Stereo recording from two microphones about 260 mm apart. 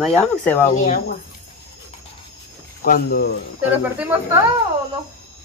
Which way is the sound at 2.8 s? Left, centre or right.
Left.